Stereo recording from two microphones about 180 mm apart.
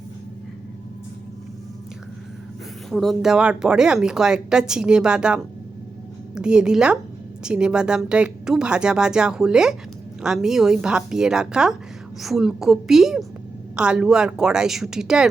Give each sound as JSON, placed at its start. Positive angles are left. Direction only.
{"t": 2.9, "sound": "speech", "side_deg": 0}